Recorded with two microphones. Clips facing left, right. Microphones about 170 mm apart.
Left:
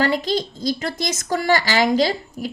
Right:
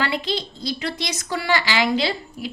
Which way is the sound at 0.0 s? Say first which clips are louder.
Left 5 dB; 45° left (ahead or behind).